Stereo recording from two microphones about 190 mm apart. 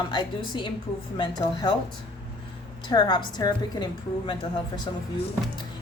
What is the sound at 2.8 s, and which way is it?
A woman's voice, 25° left (ahead or behind).